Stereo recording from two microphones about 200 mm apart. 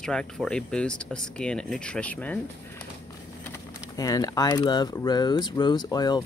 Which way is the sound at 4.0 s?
20° left (ahead or behind).